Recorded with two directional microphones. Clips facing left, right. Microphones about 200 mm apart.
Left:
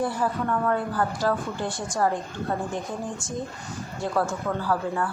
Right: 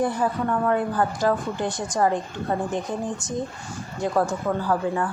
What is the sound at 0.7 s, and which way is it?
A woman's voice, 20° right (ahead or behind).